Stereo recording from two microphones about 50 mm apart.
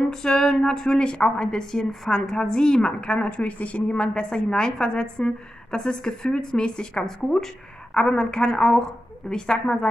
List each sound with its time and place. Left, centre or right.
0.1 s a woman's voice: centre